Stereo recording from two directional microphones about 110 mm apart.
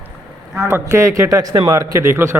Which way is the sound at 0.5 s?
25° right (ahead or behind).